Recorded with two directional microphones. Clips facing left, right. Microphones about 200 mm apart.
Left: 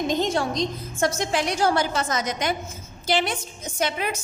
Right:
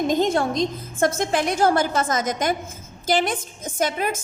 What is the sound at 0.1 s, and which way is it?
A woman's voice, 50° right (ahead or behind).